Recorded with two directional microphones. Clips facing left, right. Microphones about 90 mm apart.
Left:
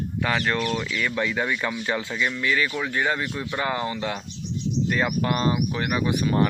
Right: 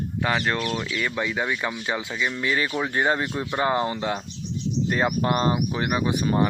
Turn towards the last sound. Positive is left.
turn(degrees=-20)  # may be behind; listen again after turning